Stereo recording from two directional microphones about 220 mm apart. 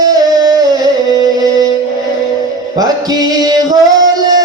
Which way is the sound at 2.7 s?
15° right (ahead or behind).